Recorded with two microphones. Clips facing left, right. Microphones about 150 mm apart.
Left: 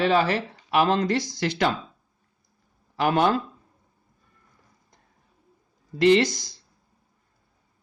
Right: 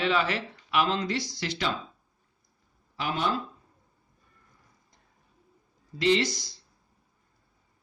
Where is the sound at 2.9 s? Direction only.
55° left (ahead or behind).